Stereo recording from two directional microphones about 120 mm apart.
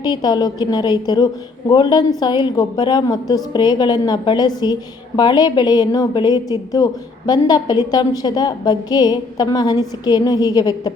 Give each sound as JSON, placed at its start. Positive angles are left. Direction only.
{"t": 0.0, "sound": "a woman's voice", "side_deg": 35}